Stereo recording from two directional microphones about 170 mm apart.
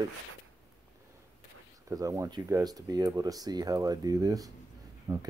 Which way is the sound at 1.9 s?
20° right (ahead or behind).